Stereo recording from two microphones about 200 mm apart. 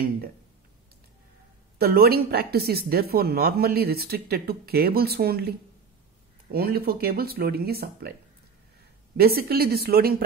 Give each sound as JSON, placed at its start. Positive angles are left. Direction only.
{"t": 1.8, "sound": "speech", "side_deg": -50}
{"t": 6.5, "sound": "speech", "side_deg": -50}
{"t": 9.1, "sound": "speech", "side_deg": -50}